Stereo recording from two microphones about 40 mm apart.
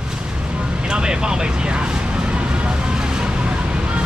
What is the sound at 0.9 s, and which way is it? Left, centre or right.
Speech, right.